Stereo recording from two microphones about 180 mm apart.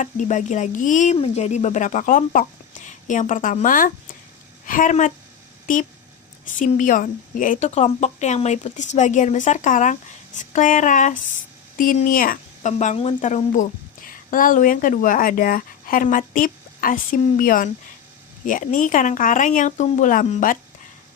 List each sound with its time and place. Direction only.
0.0 s a woman's voice: 40° left (ahead or behind)